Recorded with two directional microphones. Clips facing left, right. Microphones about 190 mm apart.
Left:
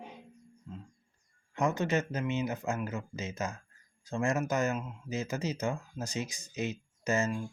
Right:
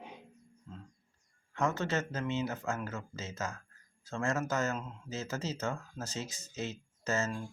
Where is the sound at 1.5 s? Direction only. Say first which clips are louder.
Left 3 dB; 15° left (ahead or behind).